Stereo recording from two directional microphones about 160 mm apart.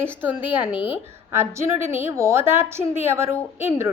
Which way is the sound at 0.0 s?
10° right (ahead or behind).